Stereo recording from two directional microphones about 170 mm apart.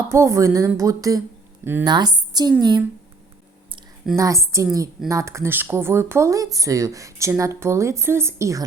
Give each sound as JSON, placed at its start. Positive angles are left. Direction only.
{"t": 0.1, "sound": "a woman's voice", "side_deg": -15}
{"t": 4.1, "sound": "speech", "side_deg": -20}